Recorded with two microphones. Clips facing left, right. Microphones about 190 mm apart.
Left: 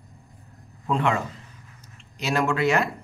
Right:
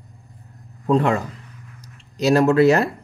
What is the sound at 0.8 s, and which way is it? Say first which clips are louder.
Speech: right 6 dB; 40° right (ahead or behind).